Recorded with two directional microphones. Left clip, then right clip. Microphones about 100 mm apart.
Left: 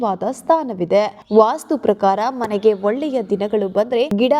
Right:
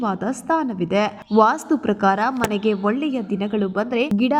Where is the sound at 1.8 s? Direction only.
40° left (ahead or behind).